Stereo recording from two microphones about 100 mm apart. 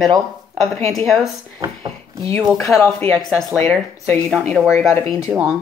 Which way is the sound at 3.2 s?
5° left (ahead or behind).